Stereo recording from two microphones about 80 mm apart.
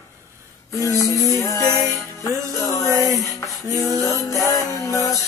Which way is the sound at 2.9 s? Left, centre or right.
Right.